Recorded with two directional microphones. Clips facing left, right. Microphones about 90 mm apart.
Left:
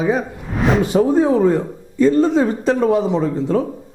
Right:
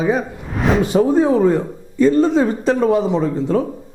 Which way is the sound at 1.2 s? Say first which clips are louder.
Even; 25° right (ahead or behind).